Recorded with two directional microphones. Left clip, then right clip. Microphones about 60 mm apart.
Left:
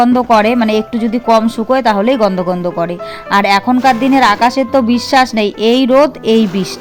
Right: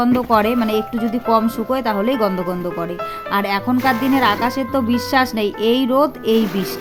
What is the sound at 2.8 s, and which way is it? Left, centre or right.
Speech, left.